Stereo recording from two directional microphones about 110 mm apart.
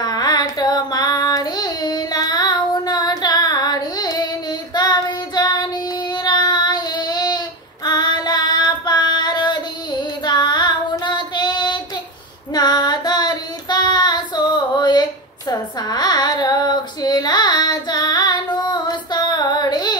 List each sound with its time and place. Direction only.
0.0 s child singing: 40° left (ahead or behind)
10.2 s female singing: 40° left (ahead or behind)
12.5 s child singing: 40° left (ahead or behind)